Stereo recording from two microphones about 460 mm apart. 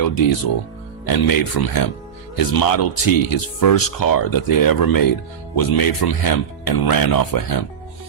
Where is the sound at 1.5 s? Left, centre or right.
Left.